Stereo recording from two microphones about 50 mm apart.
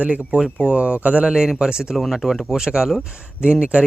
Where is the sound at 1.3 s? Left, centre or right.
Centre.